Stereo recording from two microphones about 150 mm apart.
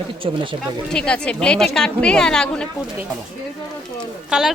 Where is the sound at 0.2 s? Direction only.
40° right (ahead or behind).